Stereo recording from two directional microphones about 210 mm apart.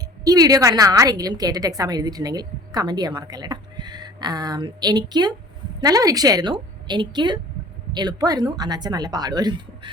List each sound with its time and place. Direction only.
0.3 s a woman's voice: 15° right (ahead or behind)